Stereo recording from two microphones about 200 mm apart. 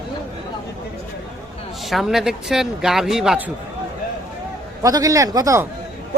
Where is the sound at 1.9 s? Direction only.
Centre (ahead or behind).